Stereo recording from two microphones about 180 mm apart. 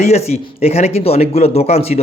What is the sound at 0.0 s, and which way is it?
Speech, 35° left (ahead or behind).